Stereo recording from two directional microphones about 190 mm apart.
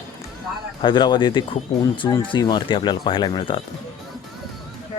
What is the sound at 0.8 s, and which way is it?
Speech, 25° left (ahead or behind).